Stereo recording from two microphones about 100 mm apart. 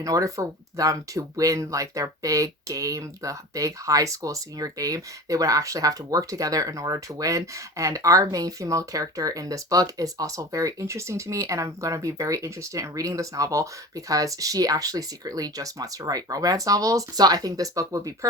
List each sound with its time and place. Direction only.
0.0 s speech: 35° right (ahead or behind)